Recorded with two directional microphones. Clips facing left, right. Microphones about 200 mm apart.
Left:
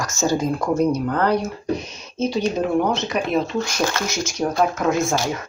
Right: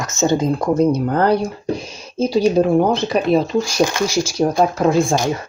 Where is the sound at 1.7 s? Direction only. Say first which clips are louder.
Right 4 dB; 30° right (ahead or behind).